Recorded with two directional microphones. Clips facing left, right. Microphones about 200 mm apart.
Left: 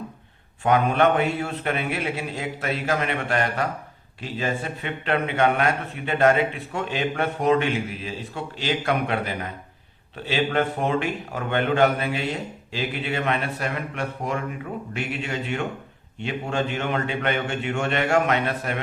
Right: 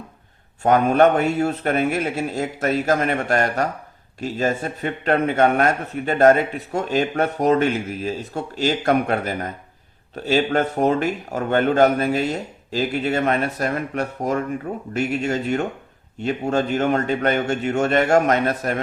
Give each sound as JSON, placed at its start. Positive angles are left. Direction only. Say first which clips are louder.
{"t": 0.6, "sound": "a man's voice", "louder": "right 4 dB", "side_deg": -45}